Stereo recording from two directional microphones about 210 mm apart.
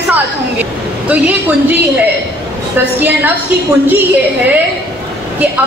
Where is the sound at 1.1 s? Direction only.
10° right (ahead or behind).